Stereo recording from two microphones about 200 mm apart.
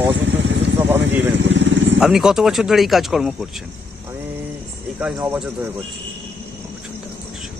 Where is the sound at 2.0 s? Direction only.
Centre (ahead or behind).